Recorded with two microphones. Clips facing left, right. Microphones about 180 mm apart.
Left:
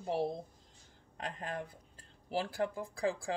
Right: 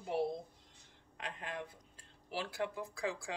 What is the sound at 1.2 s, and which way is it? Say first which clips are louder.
Speech: left 3 dB; 40° left (ahead or behind).